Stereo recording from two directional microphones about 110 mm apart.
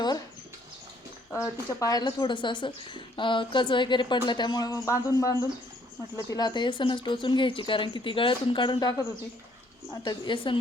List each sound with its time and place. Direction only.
1.3 s speech: 30° left (ahead or behind); by 10.6 s 50° left (ahead or behind)